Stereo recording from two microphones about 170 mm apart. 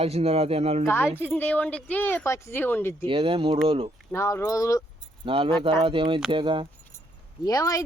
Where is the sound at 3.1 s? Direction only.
30° right (ahead or behind).